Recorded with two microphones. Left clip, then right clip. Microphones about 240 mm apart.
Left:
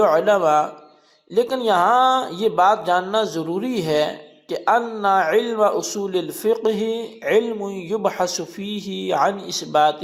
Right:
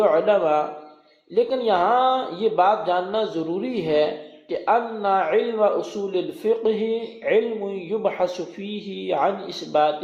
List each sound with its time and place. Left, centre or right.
0.0 s speech: left